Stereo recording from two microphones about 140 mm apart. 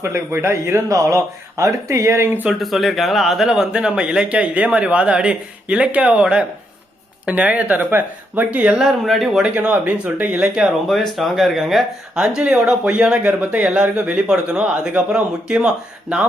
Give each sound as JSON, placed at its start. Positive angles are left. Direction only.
{"t": 0.0, "sound": "speech", "side_deg": -20}
{"t": 2.6, "sound": "speech", "side_deg": 0}